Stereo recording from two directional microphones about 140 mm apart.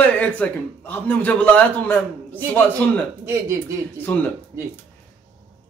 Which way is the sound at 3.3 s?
20° right (ahead or behind).